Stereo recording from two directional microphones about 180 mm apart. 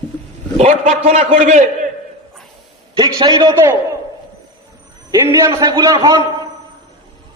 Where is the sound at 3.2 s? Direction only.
20° right (ahead or behind).